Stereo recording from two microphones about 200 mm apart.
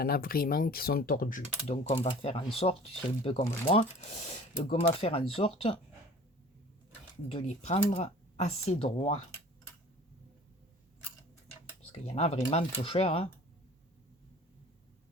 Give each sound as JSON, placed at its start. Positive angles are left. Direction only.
{"t": 0.0, "sound": "speech", "side_deg": 50}
{"t": 1.6, "sound": "speech", "side_deg": 30}
{"t": 7.3, "sound": "speech", "side_deg": 30}
{"t": 11.9, "sound": "speech", "side_deg": 30}